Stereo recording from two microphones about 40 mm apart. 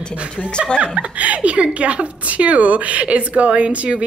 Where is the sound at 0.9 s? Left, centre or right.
Right.